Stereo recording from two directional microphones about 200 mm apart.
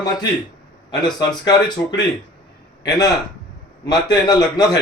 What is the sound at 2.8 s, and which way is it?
A man's voice, 20° left (ahead or behind).